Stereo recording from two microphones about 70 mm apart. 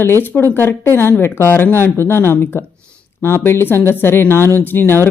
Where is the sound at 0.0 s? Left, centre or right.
Left.